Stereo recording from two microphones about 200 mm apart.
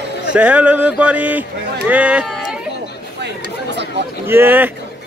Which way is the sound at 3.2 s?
60° right (ahead or behind).